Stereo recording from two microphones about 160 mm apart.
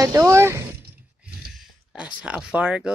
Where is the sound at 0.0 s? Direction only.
20° right (ahead or behind).